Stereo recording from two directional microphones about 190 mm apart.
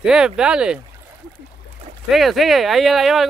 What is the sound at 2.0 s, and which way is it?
Speech, centre (ahead or behind).